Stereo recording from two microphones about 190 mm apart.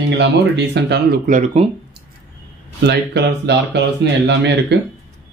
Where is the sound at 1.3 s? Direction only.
40° right (ahead or behind).